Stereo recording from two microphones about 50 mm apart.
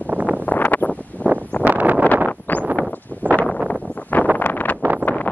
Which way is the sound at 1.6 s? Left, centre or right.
Right.